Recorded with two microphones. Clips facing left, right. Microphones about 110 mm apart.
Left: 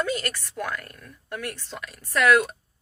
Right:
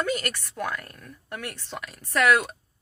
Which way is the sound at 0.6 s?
15° right (ahead or behind).